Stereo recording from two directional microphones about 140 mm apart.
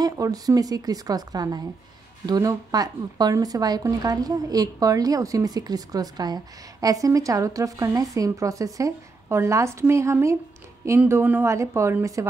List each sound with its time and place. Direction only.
0.0 s speech: 25° right (ahead or behind)